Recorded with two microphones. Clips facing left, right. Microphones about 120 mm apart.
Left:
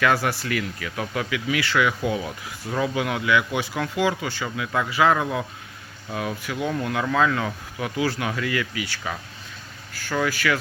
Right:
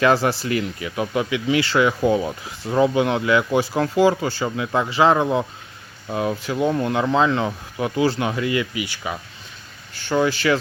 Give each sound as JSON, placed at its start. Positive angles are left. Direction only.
{"t": 0.0, "sound": "speech", "side_deg": -25}